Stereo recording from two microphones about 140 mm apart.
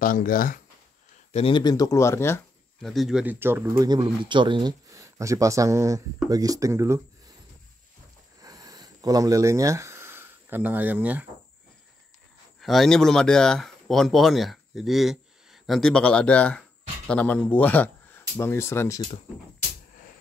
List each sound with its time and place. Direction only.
0.0 s speech: 85° left
1.3 s speech: 40° left (ahead or behind)
1.6 s speech: 25° left (ahead or behind)
2.8 s speech: centre (ahead or behind)
3.3 s speech: 15° right (ahead or behind)
3.8 s a man's voice: 30° right (ahead or behind)
4.8 s speech: 20° right (ahead or behind)
8.4 s a sound: 25° right (ahead or behind)
12.5 s speech: centre (ahead or behind); by 18.9 s 20° left (ahead or behind)